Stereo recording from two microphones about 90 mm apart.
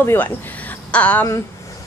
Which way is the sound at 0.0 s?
25° left (ahead or behind).